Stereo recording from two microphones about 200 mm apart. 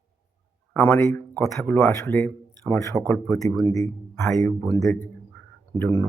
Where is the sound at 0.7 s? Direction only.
10° left (ahead or behind).